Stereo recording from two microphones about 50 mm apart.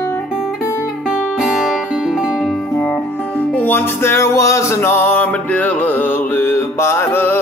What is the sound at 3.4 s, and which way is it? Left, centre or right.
Music, left.